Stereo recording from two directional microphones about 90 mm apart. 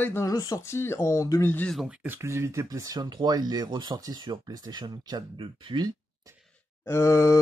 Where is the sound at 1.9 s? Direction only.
20° right (ahead or behind); by 5.2 s 50° right (ahead or behind).